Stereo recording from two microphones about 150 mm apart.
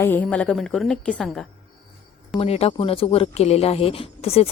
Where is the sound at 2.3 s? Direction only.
40° left (ahead or behind).